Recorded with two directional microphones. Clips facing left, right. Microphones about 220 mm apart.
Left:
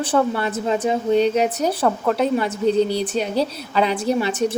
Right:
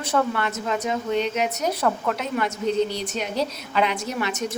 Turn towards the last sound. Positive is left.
turn(degrees=30)  # may be behind; listen again after turning